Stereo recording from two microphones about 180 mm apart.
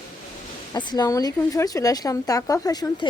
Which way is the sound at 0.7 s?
25° left (ahead or behind).